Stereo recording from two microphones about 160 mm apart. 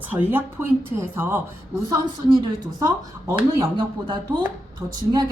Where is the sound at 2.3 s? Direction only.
25° right (ahead or behind).